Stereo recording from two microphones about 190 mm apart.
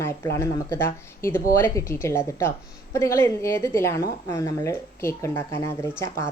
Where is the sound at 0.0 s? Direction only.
15° left (ahead or behind).